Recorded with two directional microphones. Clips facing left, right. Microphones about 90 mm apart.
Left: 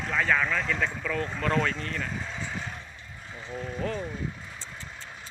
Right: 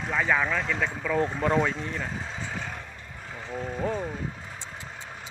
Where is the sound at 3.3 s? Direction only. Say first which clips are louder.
Right 2 dB; 50° right (ahead or behind).